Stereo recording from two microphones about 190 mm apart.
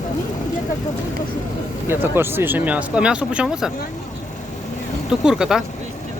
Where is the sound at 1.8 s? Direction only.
10° right (ahead or behind).